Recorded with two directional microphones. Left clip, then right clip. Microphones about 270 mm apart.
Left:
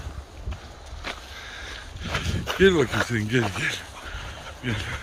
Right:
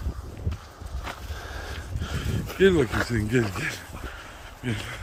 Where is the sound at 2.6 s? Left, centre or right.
Centre.